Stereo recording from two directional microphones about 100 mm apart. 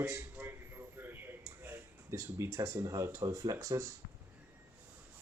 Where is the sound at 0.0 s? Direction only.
30° right (ahead or behind).